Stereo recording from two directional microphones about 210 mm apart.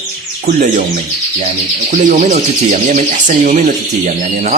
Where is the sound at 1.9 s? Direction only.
35° right (ahead or behind).